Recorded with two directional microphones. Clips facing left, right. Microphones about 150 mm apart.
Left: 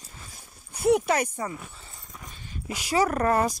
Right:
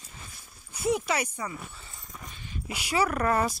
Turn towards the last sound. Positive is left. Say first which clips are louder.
# left 3 dB
turn(degrees=35)  # may be behind; listen again after turning